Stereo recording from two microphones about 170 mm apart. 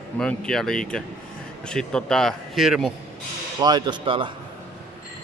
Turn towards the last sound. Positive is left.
turn(degrees=-30)  # may be behind; listen again after turning